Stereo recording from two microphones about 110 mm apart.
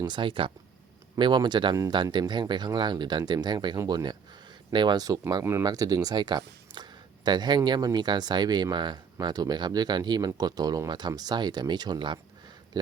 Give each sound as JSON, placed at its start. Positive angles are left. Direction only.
{"t": 0.0, "sound": "speech", "side_deg": -45}